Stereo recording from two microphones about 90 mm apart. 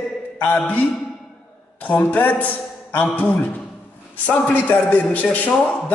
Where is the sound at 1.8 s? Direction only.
20° left (ahead or behind).